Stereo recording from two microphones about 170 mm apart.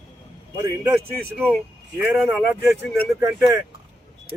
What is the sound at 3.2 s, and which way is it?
Speech, 20° right (ahead or behind).